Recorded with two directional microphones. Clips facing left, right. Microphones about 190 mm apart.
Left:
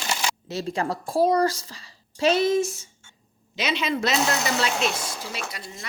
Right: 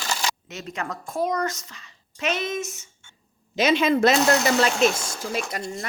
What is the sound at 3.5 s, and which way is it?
Speech, 45° right (ahead or behind).